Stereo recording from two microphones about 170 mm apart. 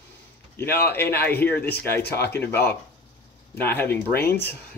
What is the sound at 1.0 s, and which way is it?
Speech, 70° left (ahead or behind).